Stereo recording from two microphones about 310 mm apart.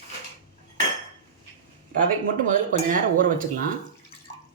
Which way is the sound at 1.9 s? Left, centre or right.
Right.